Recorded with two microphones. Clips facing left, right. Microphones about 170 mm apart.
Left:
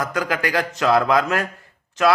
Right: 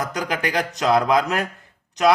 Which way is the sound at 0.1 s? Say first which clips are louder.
Left 2 dB; 20° right (ahead or behind).